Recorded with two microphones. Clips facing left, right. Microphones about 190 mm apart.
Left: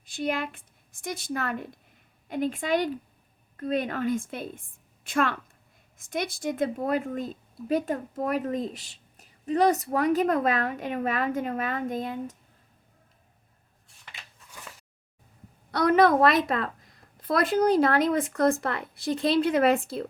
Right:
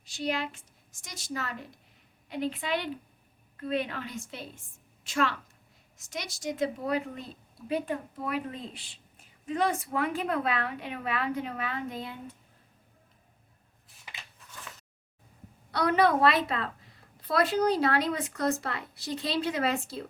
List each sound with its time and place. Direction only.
0.0 s a woman's voice: 55° left (ahead or behind)
15.7 s a woman's voice: 45° left (ahead or behind)